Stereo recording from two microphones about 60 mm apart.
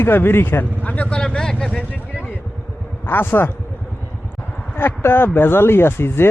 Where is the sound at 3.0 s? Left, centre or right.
Left.